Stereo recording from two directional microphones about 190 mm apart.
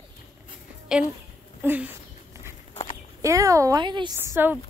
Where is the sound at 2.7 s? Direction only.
35° left (ahead or behind).